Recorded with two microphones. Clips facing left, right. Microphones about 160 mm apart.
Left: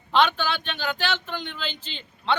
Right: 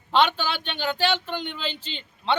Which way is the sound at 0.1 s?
30° right (ahead or behind).